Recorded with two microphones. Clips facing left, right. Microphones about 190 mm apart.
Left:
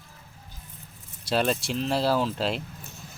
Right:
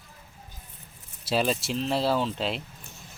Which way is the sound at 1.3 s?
Centre (ahead or behind).